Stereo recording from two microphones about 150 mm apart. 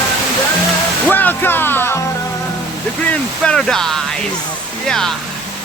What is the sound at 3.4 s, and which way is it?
Speech, 5° left (ahead or behind).